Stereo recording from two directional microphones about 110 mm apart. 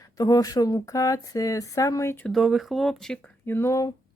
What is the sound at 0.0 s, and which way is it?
Speech, 35° left (ahead or behind).